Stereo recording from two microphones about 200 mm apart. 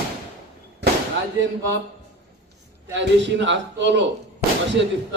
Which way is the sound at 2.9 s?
60° right (ahead or behind).